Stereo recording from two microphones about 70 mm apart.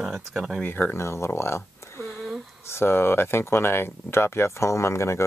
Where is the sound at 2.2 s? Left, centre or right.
Centre.